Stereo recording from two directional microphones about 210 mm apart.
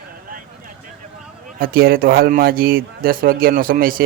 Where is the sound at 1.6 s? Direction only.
45° right (ahead or behind).